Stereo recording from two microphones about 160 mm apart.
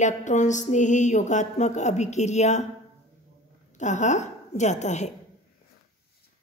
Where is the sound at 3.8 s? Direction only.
50° left (ahead or behind).